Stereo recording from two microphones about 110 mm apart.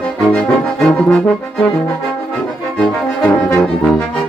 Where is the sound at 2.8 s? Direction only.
10° left (ahead or behind).